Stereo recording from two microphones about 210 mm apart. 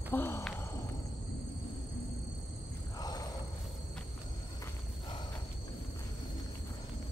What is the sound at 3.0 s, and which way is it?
Wild animals, 20° left (ahead or behind).